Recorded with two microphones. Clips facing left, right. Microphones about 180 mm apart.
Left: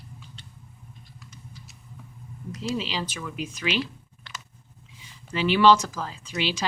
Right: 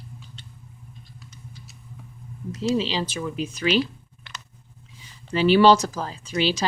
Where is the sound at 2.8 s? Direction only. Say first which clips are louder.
Right 5 dB; 30° right (ahead or behind).